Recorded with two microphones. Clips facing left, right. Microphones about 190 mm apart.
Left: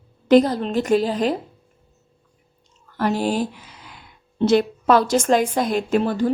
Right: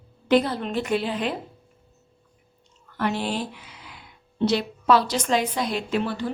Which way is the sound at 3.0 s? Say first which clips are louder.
Left 5 dB; 40° left (ahead or behind).